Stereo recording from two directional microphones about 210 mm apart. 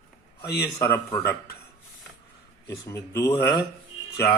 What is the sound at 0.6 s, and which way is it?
Speech, 15° left (ahead or behind).